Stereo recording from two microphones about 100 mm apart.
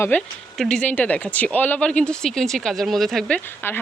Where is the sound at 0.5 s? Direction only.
10° left (ahead or behind).